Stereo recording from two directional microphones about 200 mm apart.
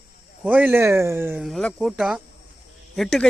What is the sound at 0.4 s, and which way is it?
Speech, 10° right (ahead or behind).